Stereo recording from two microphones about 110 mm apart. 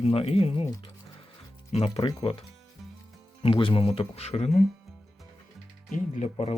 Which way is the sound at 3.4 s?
50° left (ahead or behind).